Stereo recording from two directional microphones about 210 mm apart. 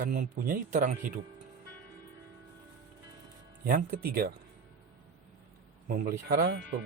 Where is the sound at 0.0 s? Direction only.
40° right (ahead or behind).